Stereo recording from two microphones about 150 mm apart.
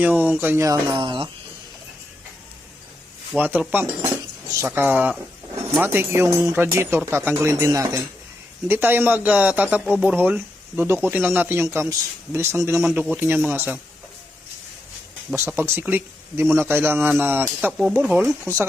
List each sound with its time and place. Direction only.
0.0 s speech: 10° right (ahead or behind)
0.9 s speech: 35° right (ahead or behind)
3.3 s speech: 10° right (ahead or behind)
15.5 s speech: 15° right (ahead or behind)